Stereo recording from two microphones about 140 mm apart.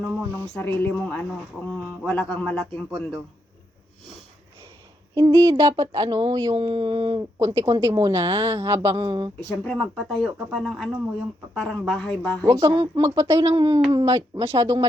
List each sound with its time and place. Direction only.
0.1 s speech: 15° right (ahead or behind)
0.5 s speech: 10° left (ahead or behind)
5.1 s speech: 35° right (ahead or behind)
7.2 s a woman's voice: 25° right (ahead or behind)
8.6 s a woman's voice: 20° right (ahead or behind)
9.0 s speech: 35° right (ahead or behind)
9.5 s speech: 5° left (ahead or behind)
12.5 s a woman's voice: 20° right (ahead or behind)